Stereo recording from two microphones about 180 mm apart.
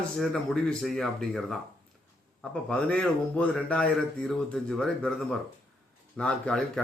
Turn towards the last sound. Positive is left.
turn(degrees=5)  # may be behind; listen again after turning